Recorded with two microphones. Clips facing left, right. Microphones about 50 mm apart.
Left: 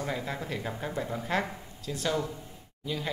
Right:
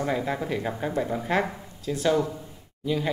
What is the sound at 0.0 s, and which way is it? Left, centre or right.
Speech, centre.